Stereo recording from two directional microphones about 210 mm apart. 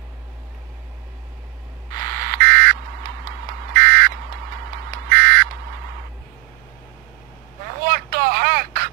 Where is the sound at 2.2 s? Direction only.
45° right (ahead or behind).